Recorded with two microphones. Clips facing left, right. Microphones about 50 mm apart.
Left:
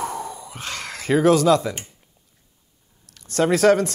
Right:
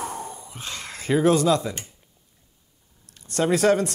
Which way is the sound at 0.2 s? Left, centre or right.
Left.